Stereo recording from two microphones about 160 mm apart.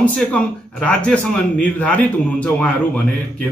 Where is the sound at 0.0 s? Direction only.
10° left (ahead or behind).